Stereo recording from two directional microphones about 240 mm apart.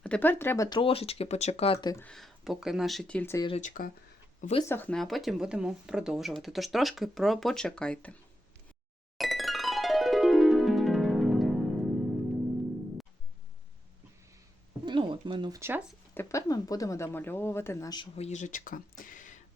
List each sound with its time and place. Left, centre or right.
0.0 s speech: centre
2.0 s speech: centre
3.6 s speech: left
4.7 s speech: centre
9.1 s music: centre
14.8 s a sound: right
16.1 s a woman's voice: centre; by 19.4 s left